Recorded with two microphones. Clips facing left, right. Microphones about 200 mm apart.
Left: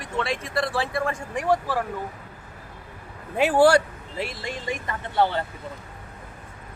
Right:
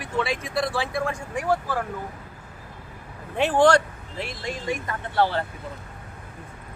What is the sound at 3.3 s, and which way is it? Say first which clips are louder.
Speech: left 1 dB; 10° left (ahead or behind).